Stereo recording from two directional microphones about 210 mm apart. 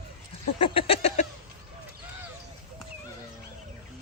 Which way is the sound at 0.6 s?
25° left (ahead or behind).